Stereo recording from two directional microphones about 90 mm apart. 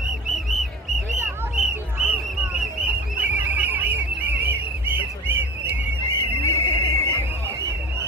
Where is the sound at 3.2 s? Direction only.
20° right (ahead or behind).